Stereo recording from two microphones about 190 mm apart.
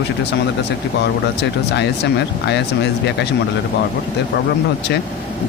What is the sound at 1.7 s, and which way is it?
Speech, 65° left (ahead or behind).